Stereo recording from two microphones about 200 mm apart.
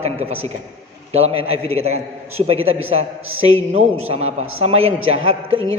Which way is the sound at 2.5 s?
90° right.